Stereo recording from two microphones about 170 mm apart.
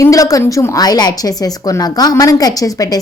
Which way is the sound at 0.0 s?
20° left (ahead or behind).